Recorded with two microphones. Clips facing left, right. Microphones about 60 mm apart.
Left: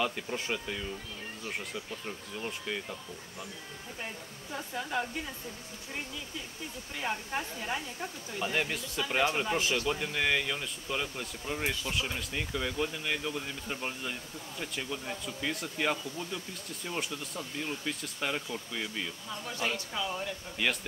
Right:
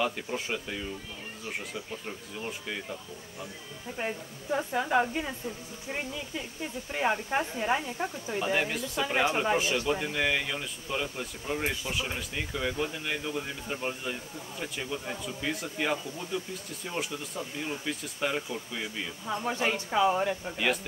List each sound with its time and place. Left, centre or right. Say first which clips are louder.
0.0 s speech: right 2 dB; centre
4.0 s speech: right 9 dB; right
8.4 s speech: right 3 dB; centre
9.8 s speech: right 3 dB; centre
19.2 s speech: right 8 dB; right
19.5 s speech: right 2 dB; right
19.9 s speech: right 10 dB; right
20.5 s speech: even; centre